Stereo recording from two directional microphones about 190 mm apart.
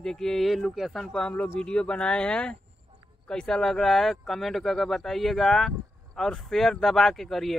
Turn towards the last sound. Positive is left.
turn(degrees=0)  # may be behind; listen again after turning